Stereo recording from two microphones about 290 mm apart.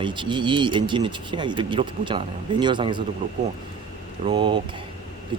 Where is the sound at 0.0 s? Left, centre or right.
Centre.